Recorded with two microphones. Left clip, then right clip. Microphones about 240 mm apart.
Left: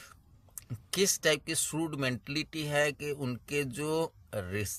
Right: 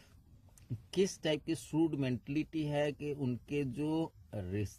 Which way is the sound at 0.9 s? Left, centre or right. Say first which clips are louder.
Left 5 dB; left.